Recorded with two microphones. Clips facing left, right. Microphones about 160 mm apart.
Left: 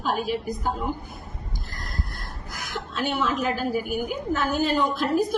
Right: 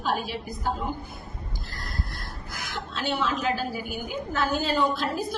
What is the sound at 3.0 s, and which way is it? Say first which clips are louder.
A woman's voice: left 2 dB; 50° left (ahead or behind).